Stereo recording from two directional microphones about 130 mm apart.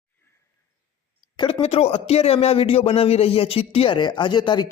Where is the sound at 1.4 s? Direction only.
35° left (ahead or behind).